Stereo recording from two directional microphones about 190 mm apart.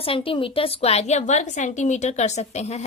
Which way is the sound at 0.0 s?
30° left (ahead or behind).